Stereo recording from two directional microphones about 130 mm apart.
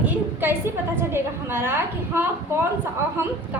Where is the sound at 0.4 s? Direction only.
15° right (ahead or behind).